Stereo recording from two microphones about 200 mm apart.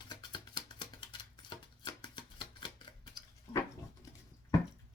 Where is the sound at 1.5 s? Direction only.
20° left (ahead or behind).